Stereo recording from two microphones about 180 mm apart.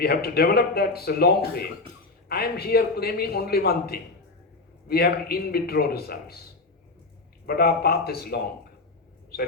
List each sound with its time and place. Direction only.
0.0 s a man's voice: 60° left (ahead or behind)
2.3 s a man's voice: 60° left (ahead or behind)
7.4 s a man's voice: 60° left (ahead or behind)